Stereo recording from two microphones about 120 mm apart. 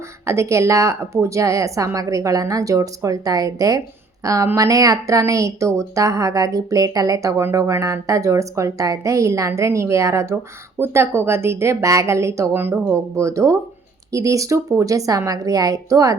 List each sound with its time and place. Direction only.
0.3 s speech: 25° right (ahead or behind)